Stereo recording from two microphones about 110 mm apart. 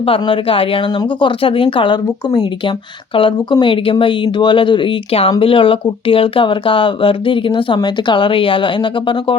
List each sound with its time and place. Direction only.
0.0 s speech: 55° left (ahead or behind)
2.3 s speech: 40° left (ahead or behind)